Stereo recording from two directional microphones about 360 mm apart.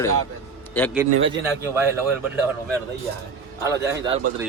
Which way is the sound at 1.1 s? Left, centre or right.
Right.